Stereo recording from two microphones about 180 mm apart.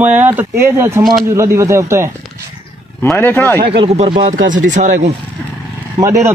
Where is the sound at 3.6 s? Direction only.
30° right (ahead or behind).